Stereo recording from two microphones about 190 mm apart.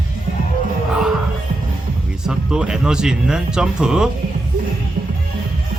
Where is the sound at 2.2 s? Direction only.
5° right (ahead or behind).